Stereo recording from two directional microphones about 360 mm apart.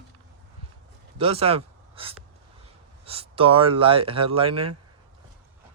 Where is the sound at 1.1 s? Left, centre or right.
Centre.